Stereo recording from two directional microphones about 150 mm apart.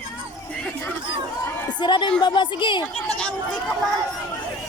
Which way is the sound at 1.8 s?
30° left (ahead or behind).